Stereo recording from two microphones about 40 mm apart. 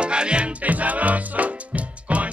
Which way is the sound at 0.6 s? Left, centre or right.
Right.